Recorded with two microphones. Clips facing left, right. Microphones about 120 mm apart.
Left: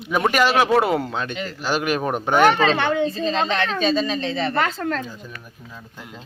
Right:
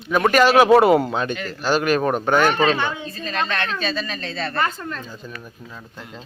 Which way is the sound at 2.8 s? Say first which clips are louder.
Left 6 dB; 75° left (ahead or behind).